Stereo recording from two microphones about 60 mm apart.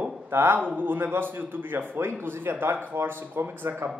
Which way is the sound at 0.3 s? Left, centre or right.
Right.